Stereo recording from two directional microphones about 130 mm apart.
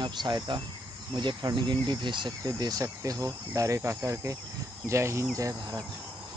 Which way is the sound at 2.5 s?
30° right (ahead or behind).